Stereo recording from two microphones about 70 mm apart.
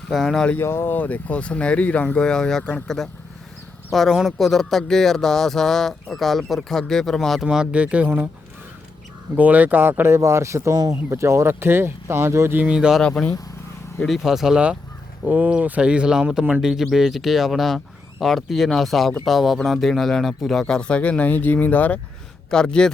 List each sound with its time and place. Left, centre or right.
0.1 s speech: centre
0.6 s speech: left; by 7.4 s centre
7.4 s speech: centre
9.3 s speech: right
10.2 s speech: right
12.5 s speech: right
13.0 s speech: centre
14.0 s speech: centre; by 22.0 s left
22.4 s speech: centre